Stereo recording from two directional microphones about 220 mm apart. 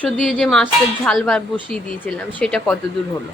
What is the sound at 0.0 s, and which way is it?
Speech, 5° left (ahead or behind).